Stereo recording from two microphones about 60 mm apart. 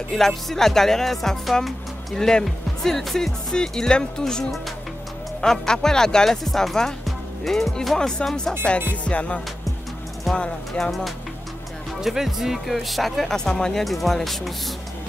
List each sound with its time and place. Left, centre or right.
0.1 s speech: centre
9.0 s music: left
10.3 s speech: centre
12.0 s speech: centre